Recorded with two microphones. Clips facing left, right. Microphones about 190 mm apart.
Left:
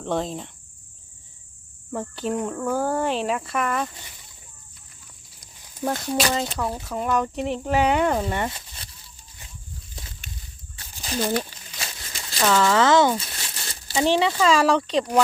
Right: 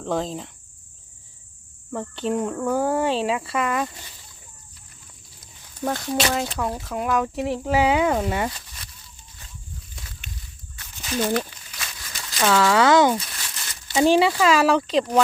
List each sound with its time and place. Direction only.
0.0 s speech: centre (ahead or behind)
1.9 s speech: 5° left (ahead or behind)
5.4 s speech: 5° left (ahead or behind)
8.4 s speech: 25° left (ahead or behind)
9.9 s walk: 35° left (ahead or behind)
10.8 s a sound: 30° left (ahead or behind)
12.4 s speech: 5° right (ahead or behind)
13.1 s crumpling: 30° left (ahead or behind)
14.1 s speech: 10° right (ahead or behind)